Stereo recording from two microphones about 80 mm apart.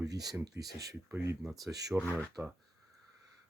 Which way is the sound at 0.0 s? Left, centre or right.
Right.